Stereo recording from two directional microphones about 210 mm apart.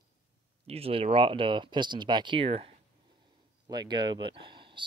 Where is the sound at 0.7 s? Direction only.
30° right (ahead or behind).